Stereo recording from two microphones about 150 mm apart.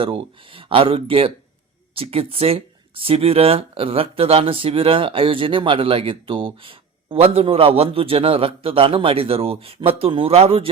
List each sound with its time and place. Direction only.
0.0 s speech: 35° right (ahead or behind)